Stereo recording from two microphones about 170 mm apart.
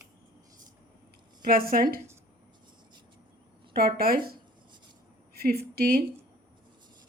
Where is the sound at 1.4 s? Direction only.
60° right (ahead or behind).